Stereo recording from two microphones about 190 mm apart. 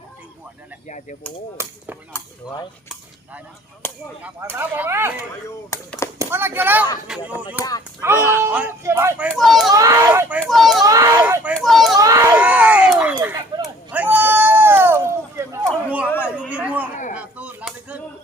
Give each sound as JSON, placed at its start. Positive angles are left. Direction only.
{"t": 1.6, "sound": "speech", "side_deg": -15}
{"t": 3.8, "sound": "speech", "side_deg": 10}
{"t": 4.2, "sound": "speech", "side_deg": -10}
{"t": 6.1, "sound": "a child's voice", "side_deg": -10}
{"t": 8.1, "sound": "speech", "side_deg": 15}
{"t": 8.4, "sound": "speech", "side_deg": -10}
{"t": 9.3, "sound": "a child's voice", "side_deg": 0}
{"t": 9.7, "sound": "speech", "side_deg": -20}
{"t": 10.4, "sound": "a child's voice", "side_deg": 0}
{"t": 10.8, "sound": "a child's voice", "side_deg": -20}
{"t": 11.5, "sound": "children playing", "side_deg": 0}
{"t": 11.9, "sound": "a sound", "side_deg": -15}
{"t": 12.4, "sound": "a sound", "side_deg": -10}
{"t": 17.2, "sound": "chop", "side_deg": -5}